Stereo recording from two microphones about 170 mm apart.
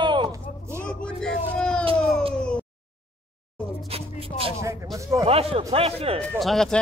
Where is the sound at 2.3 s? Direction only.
5° left (ahead or behind).